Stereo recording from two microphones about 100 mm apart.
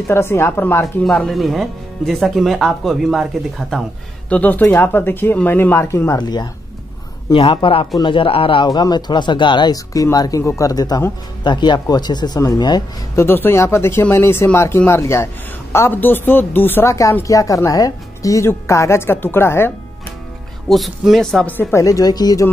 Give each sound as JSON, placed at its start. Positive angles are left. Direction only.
{"t": 0.1, "sound": "a woman's voice", "side_deg": 25}
{"t": 1.0, "sound": "speech", "side_deg": 5}
{"t": 4.3, "sound": "a woman's voice", "side_deg": 15}
{"t": 6.1, "sound": "speech", "side_deg": 45}
{"t": 7.3, "sound": "speech", "side_deg": 60}
{"t": 8.6, "sound": "speech", "side_deg": 45}
{"t": 13.1, "sound": "a woman's voice", "side_deg": 25}
{"t": 20.6, "sound": "speech", "side_deg": 0}
{"t": 21.7, "sound": "speech", "side_deg": 35}